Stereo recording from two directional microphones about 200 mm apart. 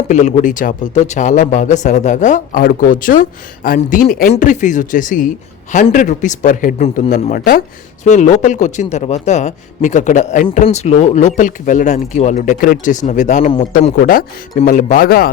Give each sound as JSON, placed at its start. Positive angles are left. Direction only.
{"t": 0.1, "sound": "speech", "side_deg": 35}
{"t": 13.7, "sound": "speech", "side_deg": 45}